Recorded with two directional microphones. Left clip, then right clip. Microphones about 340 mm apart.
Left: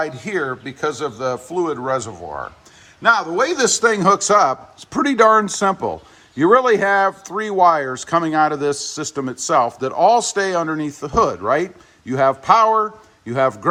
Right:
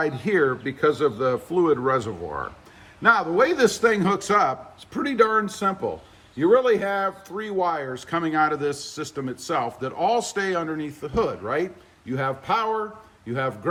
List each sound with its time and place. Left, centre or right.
0.0 s a man's voice: centre